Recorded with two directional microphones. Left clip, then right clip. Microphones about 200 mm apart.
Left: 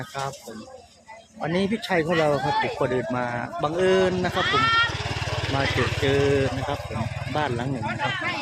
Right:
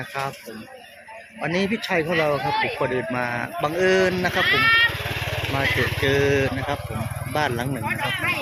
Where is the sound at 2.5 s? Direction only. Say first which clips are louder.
Right 1 dB; 35° left (ahead or behind).